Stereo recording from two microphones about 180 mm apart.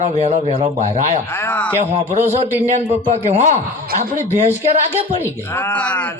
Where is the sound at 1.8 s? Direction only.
35° right (ahead or behind).